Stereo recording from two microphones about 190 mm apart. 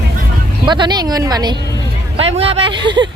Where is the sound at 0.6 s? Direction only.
25° right (ahead or behind).